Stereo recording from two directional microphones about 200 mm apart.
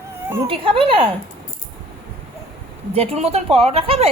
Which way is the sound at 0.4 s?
25° right (ahead or behind).